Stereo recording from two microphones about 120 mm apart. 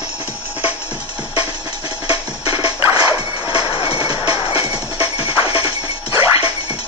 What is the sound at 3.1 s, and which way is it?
Music, 45° left (ahead or behind).